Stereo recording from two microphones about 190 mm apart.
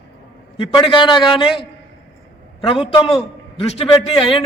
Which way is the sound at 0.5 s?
25° left (ahead or behind).